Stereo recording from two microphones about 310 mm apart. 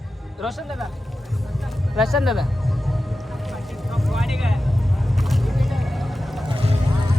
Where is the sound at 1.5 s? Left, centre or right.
Centre.